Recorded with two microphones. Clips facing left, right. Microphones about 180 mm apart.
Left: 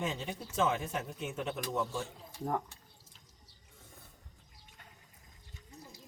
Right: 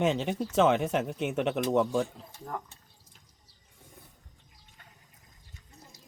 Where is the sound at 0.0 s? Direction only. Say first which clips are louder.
Right 10 dB; 75° right (ahead or behind).